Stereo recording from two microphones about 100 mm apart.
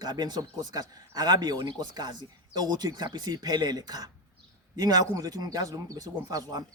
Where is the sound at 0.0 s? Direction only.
45° right (ahead or behind).